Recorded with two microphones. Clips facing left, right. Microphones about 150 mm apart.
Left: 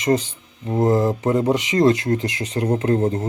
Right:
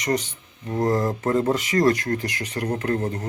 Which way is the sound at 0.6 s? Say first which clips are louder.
Left 4 dB; 25° left (ahead or behind).